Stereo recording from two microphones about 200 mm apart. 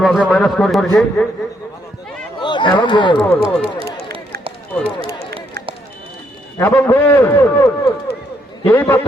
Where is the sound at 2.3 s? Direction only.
20° left (ahead or behind).